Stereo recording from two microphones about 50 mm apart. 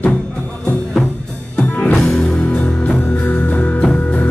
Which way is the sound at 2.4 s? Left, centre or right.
Left.